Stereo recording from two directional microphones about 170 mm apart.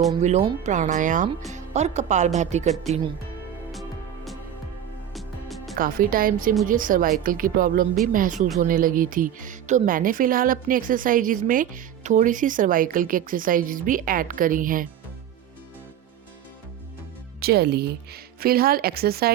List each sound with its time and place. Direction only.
0.2 s speech: 45° right (ahead or behind)
3.7 s music: centre (ahead or behind)
5.7 s speech: 55° right (ahead or behind)
17.4 s speech: 70° right (ahead or behind)